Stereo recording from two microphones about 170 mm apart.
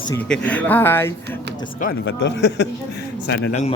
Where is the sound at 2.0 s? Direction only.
85° left.